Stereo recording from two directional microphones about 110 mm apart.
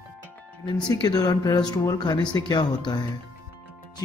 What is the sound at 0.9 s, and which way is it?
Speech, 35° left (ahead or behind).